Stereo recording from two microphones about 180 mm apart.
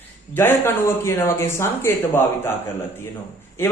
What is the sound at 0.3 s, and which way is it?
Speech, 15° left (ahead or behind).